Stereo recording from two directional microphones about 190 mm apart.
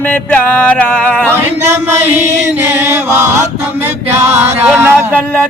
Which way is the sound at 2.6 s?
15° right (ahead or behind).